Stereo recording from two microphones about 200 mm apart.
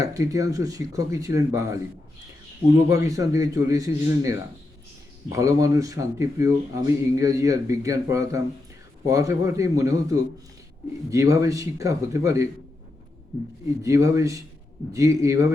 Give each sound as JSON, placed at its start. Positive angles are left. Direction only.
{"t": 0.0, "sound": "speech", "side_deg": -15}
{"t": 2.9, "sound": "speech", "side_deg": -15}
{"t": 13.8, "sound": "speech", "side_deg": -15}